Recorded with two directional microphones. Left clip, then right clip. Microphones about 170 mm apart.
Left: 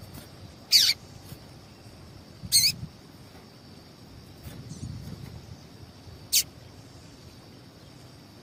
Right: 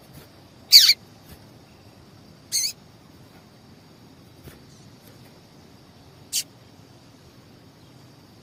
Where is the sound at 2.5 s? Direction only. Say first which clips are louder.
Left 4 dB; 10° left (ahead or behind).